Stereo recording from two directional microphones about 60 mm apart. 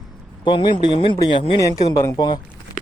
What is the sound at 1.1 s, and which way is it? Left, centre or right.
Speech, left.